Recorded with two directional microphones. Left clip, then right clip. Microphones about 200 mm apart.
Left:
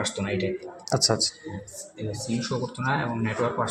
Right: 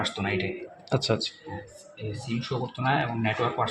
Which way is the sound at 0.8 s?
20° right (ahead or behind).